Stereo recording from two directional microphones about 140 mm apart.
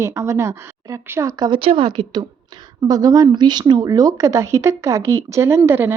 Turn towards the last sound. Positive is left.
turn(degrees=-15)  # may be behind; listen again after turning